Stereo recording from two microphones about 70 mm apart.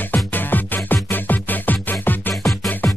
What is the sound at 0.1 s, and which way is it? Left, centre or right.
Music, left.